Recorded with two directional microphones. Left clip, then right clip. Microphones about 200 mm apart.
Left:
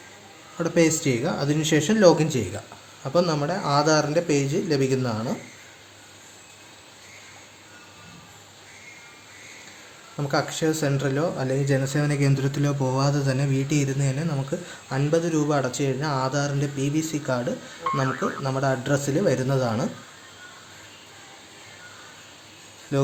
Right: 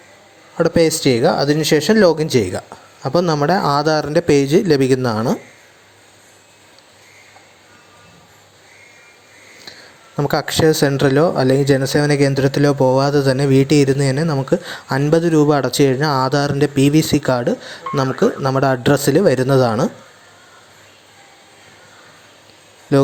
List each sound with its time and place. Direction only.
0.5 s speech: 40° right (ahead or behind)
10.2 s speech: 40° right (ahead or behind)
17.9 s speech: centre (ahead or behind)
18.2 s speech: 35° right (ahead or behind)
22.9 s speech: 35° right (ahead or behind)